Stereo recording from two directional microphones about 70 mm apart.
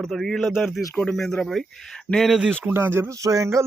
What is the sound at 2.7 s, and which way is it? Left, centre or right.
Speech, right.